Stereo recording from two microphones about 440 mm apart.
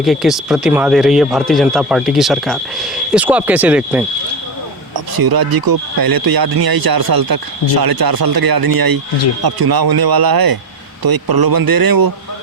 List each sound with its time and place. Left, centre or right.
0.0 s speech: centre
4.9 s speech: right